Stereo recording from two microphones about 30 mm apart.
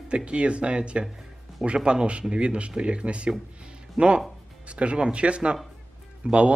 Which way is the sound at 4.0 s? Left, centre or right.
Centre.